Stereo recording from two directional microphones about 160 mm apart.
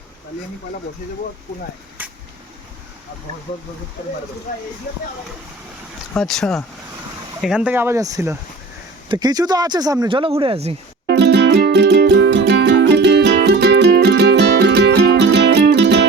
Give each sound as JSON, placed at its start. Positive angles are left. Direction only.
{"t": 2.0, "sound": "a sound", "side_deg": -10}
{"t": 6.1, "sound": "speech", "side_deg": 0}
{"t": 7.4, "sound": "speech", "side_deg": -5}
{"t": 11.1, "sound": "music", "side_deg": -90}